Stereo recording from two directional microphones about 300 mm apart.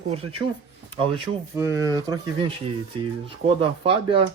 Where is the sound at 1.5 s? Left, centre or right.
Centre.